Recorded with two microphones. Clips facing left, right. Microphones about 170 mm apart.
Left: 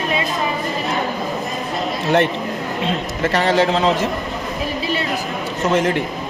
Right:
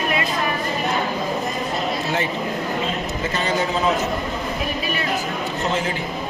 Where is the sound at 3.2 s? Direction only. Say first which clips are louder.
Left 8 dB; 80° left.